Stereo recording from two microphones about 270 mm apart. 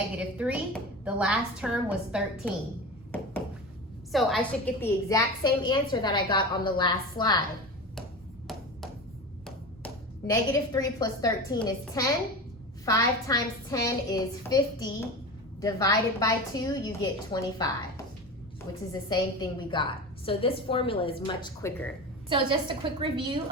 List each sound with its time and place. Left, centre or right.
0.2 s a woman's voice: centre
4.1 s a woman's voice: centre
9.8 s a woman's voice: centre
19.0 s a woman's voice: centre
22.3 s a woman's voice: centre